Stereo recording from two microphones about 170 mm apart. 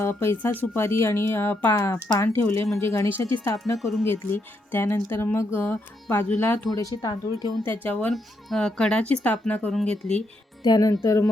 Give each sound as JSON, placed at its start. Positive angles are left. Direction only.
{"t": 0.0, "sound": "speech", "side_deg": 15}
{"t": 3.8, "sound": "speech", "side_deg": 0}
{"t": 4.0, "sound": "speech", "side_deg": 10}
{"t": 6.7, "sound": "speech", "side_deg": 25}
{"t": 7.6, "sound": "speech", "side_deg": 10}
{"t": 10.6, "sound": "speech", "side_deg": 20}